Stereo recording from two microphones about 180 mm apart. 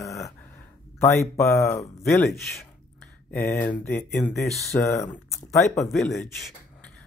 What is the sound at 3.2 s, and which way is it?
Speech, 10° left (ahead or behind).